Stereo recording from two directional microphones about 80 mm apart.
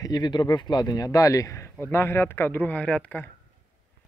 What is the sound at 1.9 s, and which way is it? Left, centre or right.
Speech, left.